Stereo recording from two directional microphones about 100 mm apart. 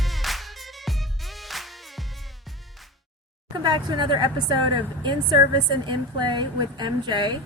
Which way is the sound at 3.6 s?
45° right (ahead or behind).